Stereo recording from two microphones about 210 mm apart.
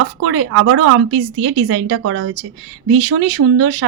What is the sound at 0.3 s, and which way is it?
A woman's voice, 75° right (ahead or behind).